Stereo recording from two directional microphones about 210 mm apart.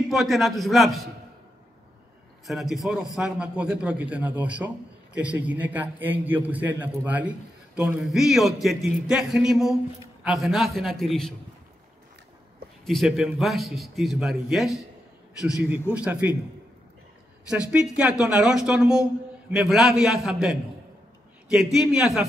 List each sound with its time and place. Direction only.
0.1 s a man's voice: centre (ahead or behind)
2.4 s a man's voice: centre (ahead or behind)
12.8 s a man's voice: centre (ahead or behind)
17.5 s a man's voice: 5° right (ahead or behind)